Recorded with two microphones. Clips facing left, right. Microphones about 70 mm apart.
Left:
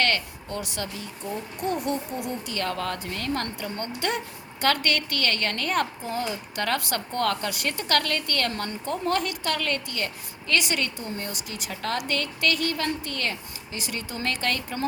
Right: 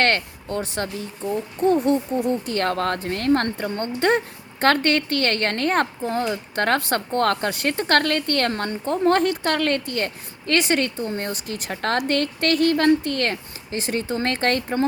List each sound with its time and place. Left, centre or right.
0.0 s a woman's voice: right